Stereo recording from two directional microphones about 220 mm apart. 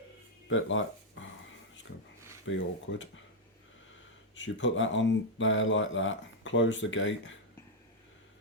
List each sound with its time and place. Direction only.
0.4 s speech: 60° left (ahead or behind)
2.9 s speech: 60° left (ahead or behind)
4.4 s speech: 55° left (ahead or behind)